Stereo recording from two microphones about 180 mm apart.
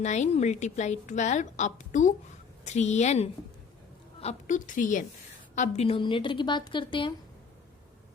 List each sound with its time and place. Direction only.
0.0 s a woman's voice: 40° left (ahead or behind)